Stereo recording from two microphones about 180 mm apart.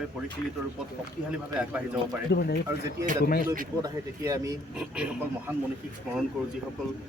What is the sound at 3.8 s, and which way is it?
Speech, 20° right (ahead or behind).